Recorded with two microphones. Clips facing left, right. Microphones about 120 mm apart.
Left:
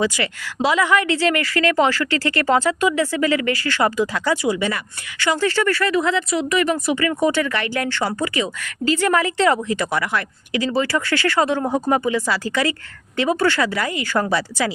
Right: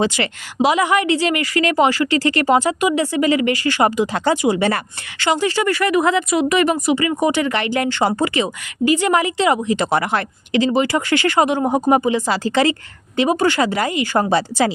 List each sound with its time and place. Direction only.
0.0 s speech: 25° right (ahead or behind)